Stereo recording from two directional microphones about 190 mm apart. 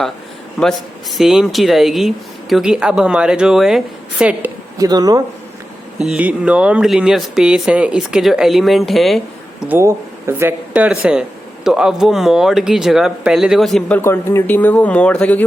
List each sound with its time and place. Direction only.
0.6 s speech: centre (ahead or behind)
4.8 s speech: 20° right (ahead or behind)
6.0 s speech: 5° right (ahead or behind)